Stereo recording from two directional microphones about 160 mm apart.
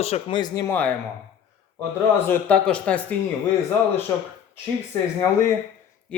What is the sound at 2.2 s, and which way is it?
Speech, 10° left (ahead or behind).